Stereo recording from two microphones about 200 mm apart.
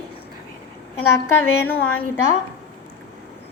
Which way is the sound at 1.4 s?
10° left (ahead or behind).